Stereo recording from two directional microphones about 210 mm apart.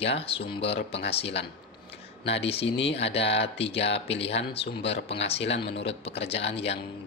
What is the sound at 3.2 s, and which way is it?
Speech, 55° left (ahead or behind).